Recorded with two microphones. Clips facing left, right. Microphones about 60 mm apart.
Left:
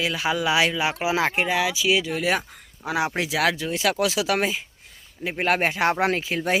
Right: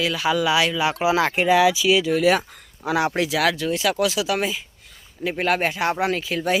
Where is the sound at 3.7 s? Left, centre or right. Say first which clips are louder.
Right 1 dB; left.